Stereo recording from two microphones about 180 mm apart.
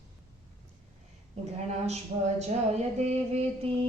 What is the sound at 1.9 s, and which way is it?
Speech, 40° right (ahead or behind).